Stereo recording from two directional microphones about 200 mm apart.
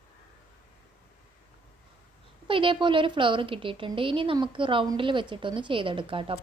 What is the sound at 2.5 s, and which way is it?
A woman's voice, 25° right (ahead or behind).